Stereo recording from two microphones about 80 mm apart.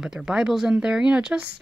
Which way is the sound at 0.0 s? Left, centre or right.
Centre.